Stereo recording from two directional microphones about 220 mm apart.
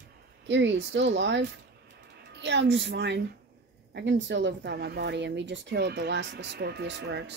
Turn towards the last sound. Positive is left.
turn(degrees=-50)  # may be behind; listen again after turning